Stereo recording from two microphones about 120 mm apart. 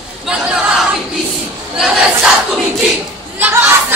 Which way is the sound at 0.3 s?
10° right (ahead or behind).